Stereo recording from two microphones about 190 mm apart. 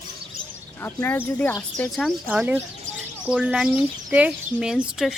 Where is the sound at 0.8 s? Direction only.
10° left (ahead or behind).